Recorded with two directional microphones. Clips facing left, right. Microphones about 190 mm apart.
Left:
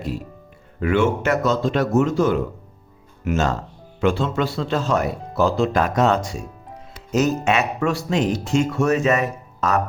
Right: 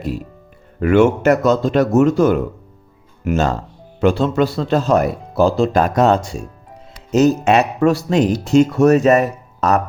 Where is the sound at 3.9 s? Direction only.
40° right (ahead or behind).